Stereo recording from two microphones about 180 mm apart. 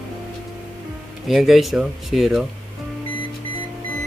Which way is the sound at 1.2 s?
Centre (ahead or behind).